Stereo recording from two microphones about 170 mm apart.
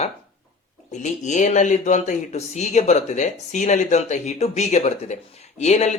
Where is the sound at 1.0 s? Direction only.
45° left (ahead or behind).